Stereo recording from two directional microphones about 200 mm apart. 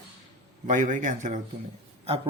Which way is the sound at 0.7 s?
40° right (ahead or behind).